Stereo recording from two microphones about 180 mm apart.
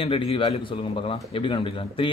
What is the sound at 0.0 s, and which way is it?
Speech, 30° left (ahead or behind).